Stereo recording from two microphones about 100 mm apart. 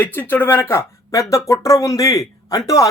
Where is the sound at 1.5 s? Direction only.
35° left (ahead or behind).